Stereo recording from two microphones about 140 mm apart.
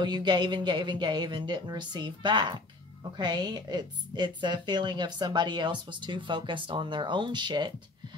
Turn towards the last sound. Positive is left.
turn(degrees=-30)  # may be behind; listen again after turning